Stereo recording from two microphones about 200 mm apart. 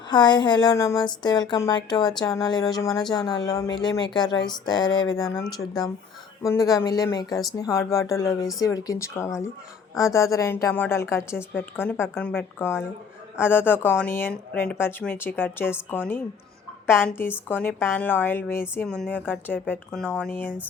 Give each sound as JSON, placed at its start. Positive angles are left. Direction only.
{"t": 0.1, "sound": "a woman's voice", "side_deg": 20}